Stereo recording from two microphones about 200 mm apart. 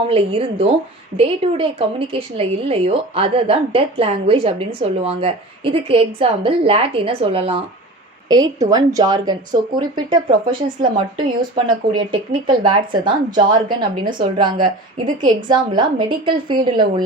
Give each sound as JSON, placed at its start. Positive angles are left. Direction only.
{"t": 0.0, "sound": "a woman's voice", "side_deg": -30}